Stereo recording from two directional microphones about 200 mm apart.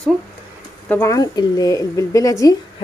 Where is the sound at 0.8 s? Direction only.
15° left (ahead or behind).